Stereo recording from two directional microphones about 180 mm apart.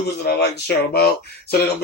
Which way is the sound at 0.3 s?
65° left (ahead or behind).